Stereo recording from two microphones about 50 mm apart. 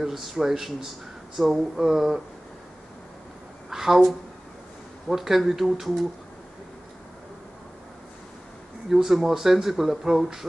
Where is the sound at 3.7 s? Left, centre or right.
Centre.